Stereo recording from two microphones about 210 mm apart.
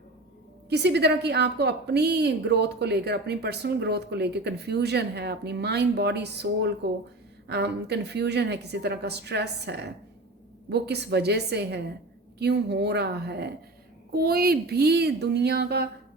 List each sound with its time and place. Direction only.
0.7 s a woman's voice: 55° right (ahead or behind)